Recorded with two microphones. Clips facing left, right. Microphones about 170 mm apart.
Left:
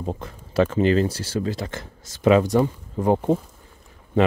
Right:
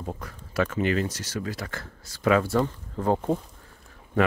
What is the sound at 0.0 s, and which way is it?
Speech, 25° left (ahead or behind).